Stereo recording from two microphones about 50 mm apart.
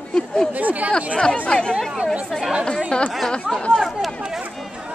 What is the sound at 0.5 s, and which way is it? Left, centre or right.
Speech, right.